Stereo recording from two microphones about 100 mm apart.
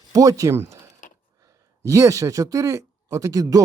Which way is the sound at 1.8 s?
30° right (ahead or behind).